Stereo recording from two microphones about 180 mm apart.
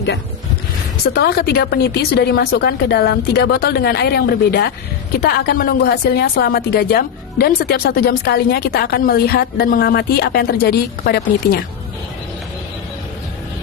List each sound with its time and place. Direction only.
1.0 s a woman's voice: 60° left (ahead or behind)